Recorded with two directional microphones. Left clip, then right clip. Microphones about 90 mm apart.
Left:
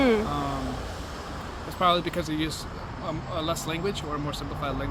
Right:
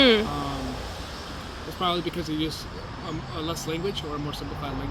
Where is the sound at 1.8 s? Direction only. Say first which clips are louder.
Left 4 dB; 30° left (ahead or behind).